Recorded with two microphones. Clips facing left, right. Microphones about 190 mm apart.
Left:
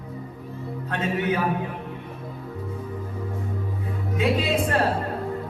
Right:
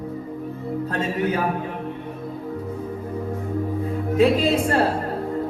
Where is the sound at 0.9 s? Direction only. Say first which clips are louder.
Even; 35° right (ahead or behind).